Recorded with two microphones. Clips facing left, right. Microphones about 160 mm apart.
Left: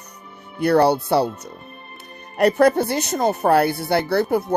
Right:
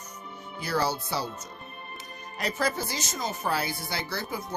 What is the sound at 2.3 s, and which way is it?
Speech, 60° left (ahead or behind).